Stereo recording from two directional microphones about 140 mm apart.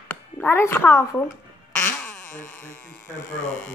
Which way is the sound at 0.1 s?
15° left (ahead or behind).